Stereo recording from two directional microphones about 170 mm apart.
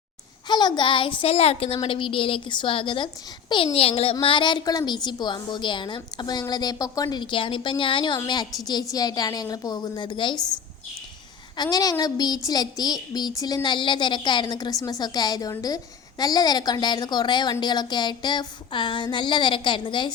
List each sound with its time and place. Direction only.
0.4 s a woman's voice: 25° left (ahead or behind)
11.5 s a woman's voice: 25° left (ahead or behind)